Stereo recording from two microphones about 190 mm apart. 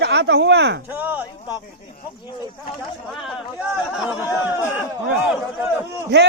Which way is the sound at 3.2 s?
5° right (ahead or behind).